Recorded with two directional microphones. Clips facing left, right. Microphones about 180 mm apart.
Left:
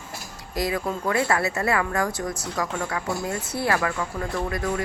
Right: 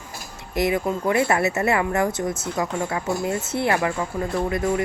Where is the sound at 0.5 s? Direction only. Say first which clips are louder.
Right 4 dB; 25° right (ahead or behind).